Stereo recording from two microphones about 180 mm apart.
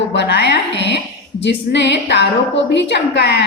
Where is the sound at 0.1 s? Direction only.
70° left (ahead or behind).